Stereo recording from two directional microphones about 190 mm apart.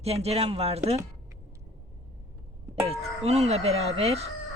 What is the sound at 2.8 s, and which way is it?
Speech, 35° right (ahead or behind).